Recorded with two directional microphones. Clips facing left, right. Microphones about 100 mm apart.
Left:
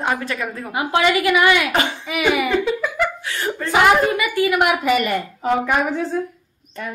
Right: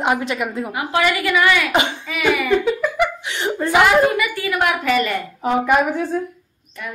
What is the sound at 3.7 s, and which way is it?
A woman's voice, 20° left (ahead or behind).